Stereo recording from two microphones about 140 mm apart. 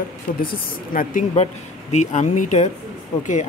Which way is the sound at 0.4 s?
85° left.